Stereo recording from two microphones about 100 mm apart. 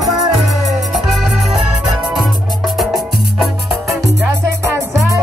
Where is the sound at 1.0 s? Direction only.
5° right (ahead or behind).